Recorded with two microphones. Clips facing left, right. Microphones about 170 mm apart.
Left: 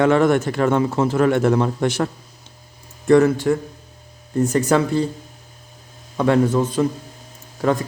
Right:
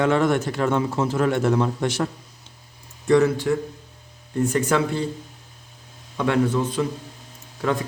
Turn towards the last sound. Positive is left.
turn(degrees=40)  # may be behind; listen again after turning